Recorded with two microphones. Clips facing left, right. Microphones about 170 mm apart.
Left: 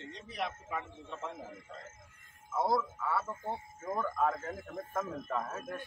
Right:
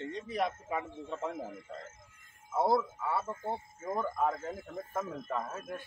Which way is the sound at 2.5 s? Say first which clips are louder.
Right 3 dB; 25° right (ahead or behind).